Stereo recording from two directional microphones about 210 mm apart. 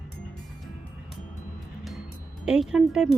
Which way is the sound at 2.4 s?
5° right (ahead or behind).